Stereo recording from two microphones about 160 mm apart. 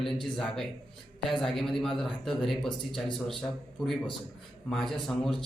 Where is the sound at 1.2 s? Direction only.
Centre (ahead or behind).